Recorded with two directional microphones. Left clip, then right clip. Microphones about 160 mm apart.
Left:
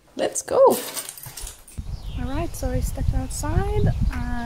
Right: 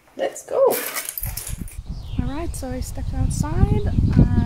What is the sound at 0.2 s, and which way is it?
Speech, 45° left (ahead or behind).